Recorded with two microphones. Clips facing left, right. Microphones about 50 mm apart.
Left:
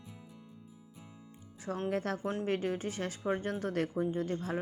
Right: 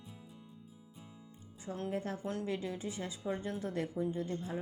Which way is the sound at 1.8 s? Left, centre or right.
Left.